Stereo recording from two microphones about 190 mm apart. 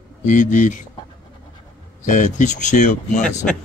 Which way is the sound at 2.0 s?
40° left (ahead or behind).